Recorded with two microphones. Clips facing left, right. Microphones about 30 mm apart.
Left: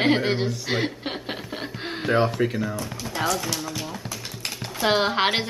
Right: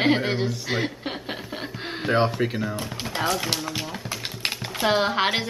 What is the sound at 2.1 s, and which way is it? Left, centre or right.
Speech, centre.